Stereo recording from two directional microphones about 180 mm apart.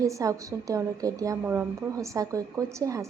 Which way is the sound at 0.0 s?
20° right (ahead or behind).